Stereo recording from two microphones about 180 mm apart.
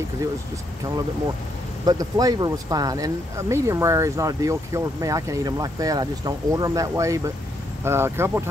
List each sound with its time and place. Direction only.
1.9 s speech: 20° right (ahead or behind)